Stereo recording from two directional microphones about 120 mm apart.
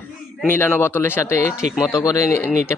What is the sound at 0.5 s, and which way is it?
Speech, 20° left (ahead or behind).